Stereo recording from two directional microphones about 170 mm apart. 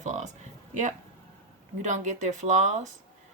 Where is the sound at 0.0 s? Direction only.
45° right (ahead or behind).